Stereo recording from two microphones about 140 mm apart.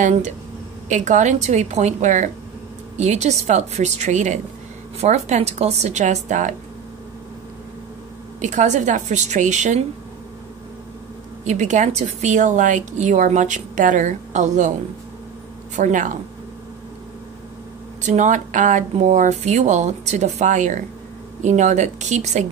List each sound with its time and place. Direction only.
0.8 s a woman's voice: 60° right (ahead or behind)
8.4 s a woman's voice: 60° right (ahead or behind)
11.4 s a woman's voice: 60° right (ahead or behind)
15.7 s a woman's voice: 65° right (ahead or behind)
18.0 s a woman's voice: 60° right (ahead or behind)